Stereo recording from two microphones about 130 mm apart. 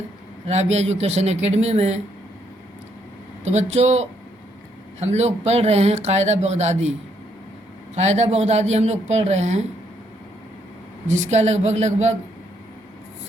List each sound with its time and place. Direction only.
0.4 s speech: 55° right (ahead or behind)
3.4 s speech: 60° right (ahead or behind)
7.9 s speech: 60° right (ahead or behind)
11.1 s speech: 65° right (ahead or behind)